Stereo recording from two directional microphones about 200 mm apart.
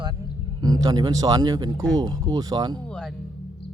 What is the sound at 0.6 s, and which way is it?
Speech, 20° right (ahead or behind).